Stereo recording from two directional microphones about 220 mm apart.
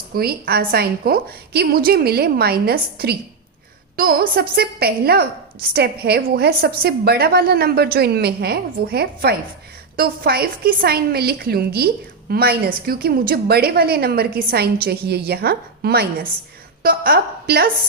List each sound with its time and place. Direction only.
0.1 s a woman's voice: 45° right (ahead or behind)